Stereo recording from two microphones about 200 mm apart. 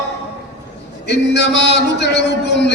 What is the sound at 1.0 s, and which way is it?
Speech, 60° left (ahead or behind).